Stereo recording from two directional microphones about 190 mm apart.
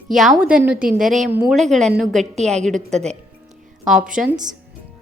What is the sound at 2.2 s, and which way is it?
Speech, 35° right (ahead or behind).